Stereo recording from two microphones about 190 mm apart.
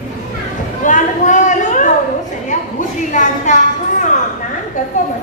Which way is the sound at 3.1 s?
40° left (ahead or behind).